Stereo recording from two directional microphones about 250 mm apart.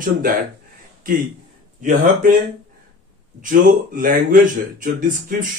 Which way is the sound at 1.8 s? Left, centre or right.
Right.